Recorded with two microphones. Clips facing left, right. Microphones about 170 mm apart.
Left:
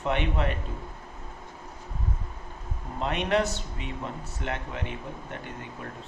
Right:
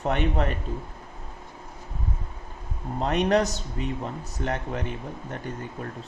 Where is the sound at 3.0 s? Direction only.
40° right (ahead or behind).